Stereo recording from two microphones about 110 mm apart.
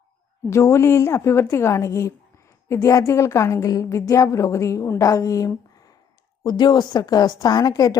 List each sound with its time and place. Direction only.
0.5 s a woman's voice: 25° left (ahead or behind)